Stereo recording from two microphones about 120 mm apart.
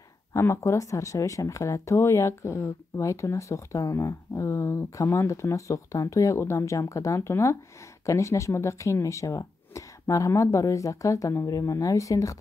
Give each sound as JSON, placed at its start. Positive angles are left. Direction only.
{"t": 0.3, "sound": "speech", "side_deg": 25}